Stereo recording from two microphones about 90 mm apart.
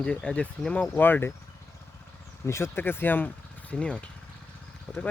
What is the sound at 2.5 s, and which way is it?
Speech, 25° left (ahead or behind).